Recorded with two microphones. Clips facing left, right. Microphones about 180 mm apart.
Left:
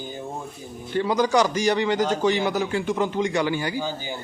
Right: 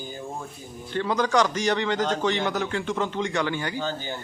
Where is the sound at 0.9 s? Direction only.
10° left (ahead or behind).